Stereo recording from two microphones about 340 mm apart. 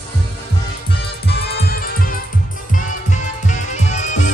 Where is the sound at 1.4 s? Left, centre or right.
Left.